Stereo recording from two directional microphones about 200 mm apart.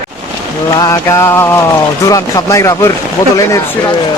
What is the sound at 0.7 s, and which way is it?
Mantra, 15° left (ahead or behind).